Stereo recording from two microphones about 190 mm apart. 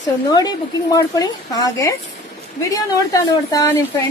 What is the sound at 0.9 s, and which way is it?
A woman's voice, 20° left (ahead or behind).